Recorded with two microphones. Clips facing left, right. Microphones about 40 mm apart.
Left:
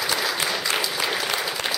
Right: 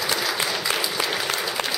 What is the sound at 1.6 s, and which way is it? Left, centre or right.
Applause, right.